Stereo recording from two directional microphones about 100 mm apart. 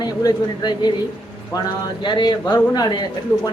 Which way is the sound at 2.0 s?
45° left (ahead or behind).